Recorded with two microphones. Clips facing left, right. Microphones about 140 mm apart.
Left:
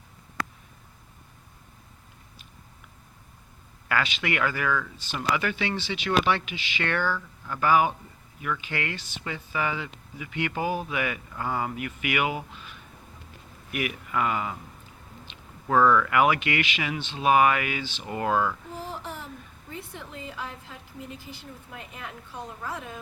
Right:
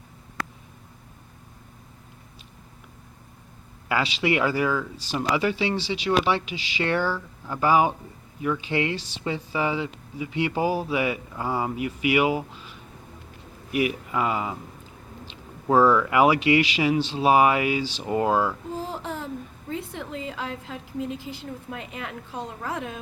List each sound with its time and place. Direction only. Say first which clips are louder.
3.8 s speech: right 4 dB; 25° right (ahead or behind)
6.9 s speech: right 2 dB; 15° right (ahead or behind)
15.3 s a sound: right 4 dB; 30° right (ahead or behind)
16.0 s speech: right 4 dB; 25° right (ahead or behind)
18.0 s speech: right 3 dB; 25° right (ahead or behind)
19.7 s a sound: right 7 dB; 90° right
21.7 s a woman's voice: right 4 dB; 90° right